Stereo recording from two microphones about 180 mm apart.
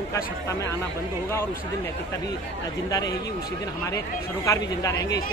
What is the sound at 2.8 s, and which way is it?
Speech, 20° left (ahead or behind).